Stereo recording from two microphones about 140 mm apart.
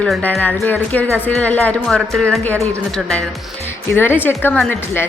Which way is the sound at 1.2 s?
10° left (ahead or behind).